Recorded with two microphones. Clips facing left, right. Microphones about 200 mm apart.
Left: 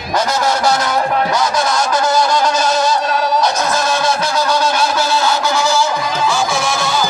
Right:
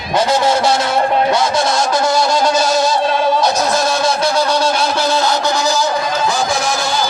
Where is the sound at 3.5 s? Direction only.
35° right (ahead or behind).